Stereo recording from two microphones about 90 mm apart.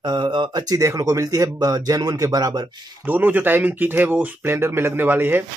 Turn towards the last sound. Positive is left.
turn(degrees=-20)  # may be behind; listen again after turning